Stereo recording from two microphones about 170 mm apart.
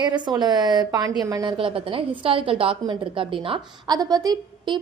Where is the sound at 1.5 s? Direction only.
30° right (ahead or behind).